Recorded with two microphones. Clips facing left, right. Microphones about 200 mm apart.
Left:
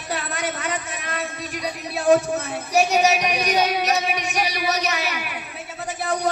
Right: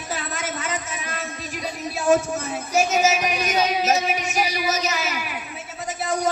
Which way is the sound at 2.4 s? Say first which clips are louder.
Left 1 dB; 65° left (ahead or behind).